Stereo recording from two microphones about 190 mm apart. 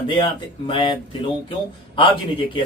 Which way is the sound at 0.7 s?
25° left (ahead or behind).